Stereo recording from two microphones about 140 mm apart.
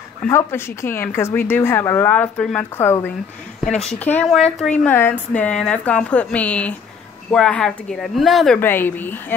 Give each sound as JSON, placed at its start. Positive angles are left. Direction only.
{"t": 0.3, "sound": "speech", "side_deg": 15}
{"t": 3.6, "sound": "speech", "side_deg": 0}
{"t": 8.5, "sound": "speech", "side_deg": 15}